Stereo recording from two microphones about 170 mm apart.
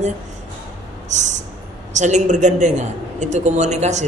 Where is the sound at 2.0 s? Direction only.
45° right (ahead or behind).